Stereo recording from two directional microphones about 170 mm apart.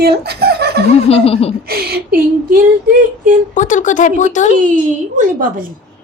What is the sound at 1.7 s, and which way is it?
Female singing, 65° right (ahead or behind).